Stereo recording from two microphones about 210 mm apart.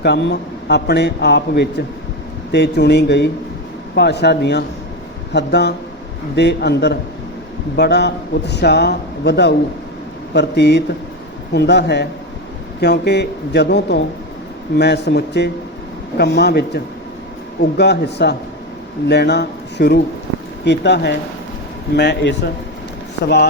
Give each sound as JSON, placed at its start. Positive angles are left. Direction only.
{"t": 0.0, "sound": "a man's voice", "side_deg": 55}